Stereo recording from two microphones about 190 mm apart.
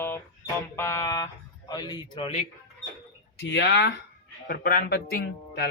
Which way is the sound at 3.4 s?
70° left (ahead or behind).